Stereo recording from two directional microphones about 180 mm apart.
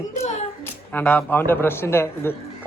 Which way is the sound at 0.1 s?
40° left (ahead or behind).